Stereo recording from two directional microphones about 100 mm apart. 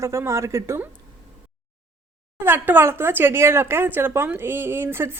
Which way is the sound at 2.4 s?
20° right (ahead or behind).